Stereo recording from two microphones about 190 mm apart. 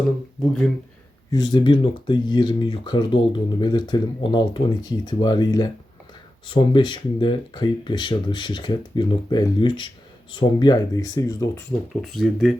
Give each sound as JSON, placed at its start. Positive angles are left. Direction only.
{"t": 1.3, "sound": "speech", "side_deg": 20}
{"t": 12.0, "sound": "speech", "side_deg": 0}